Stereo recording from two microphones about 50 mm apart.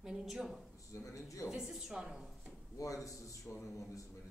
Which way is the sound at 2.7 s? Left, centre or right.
Left.